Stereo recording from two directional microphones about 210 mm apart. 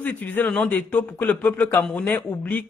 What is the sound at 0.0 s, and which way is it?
Speech, 10° left (ahead or behind).